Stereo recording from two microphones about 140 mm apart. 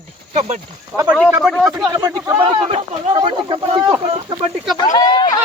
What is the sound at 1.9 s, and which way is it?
Speech, 25° right (ahead or behind).